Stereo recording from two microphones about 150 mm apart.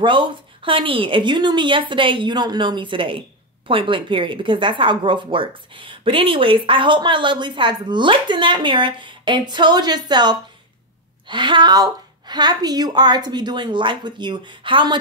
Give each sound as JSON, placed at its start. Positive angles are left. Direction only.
{"t": 0.0, "sound": "a woman's voice", "side_deg": -35}